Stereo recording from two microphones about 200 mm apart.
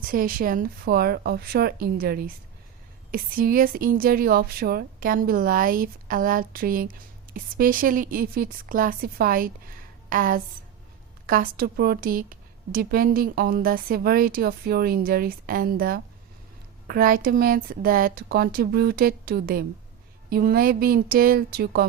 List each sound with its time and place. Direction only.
0.0 s a woman's voice: 45° right (ahead or behind)